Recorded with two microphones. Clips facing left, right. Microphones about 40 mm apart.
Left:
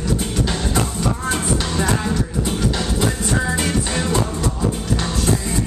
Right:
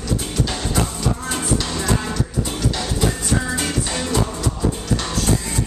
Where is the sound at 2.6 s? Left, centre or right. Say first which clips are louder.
Left 1 dB; centre.